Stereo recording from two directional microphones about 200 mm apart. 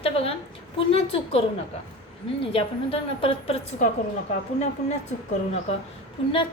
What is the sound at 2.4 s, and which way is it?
A woman's voice, 30° left (ahead or behind).